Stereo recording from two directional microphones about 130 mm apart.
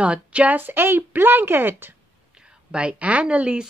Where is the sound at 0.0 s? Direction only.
10° right (ahead or behind).